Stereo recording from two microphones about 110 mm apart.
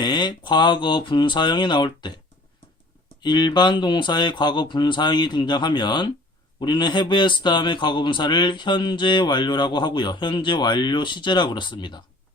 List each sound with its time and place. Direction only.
0.0 s a man's voice: 40° left (ahead or behind)
3.2 s a man's voice: 45° left (ahead or behind)